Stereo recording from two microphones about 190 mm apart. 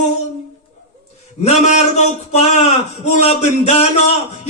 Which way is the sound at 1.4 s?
35° left (ahead or behind).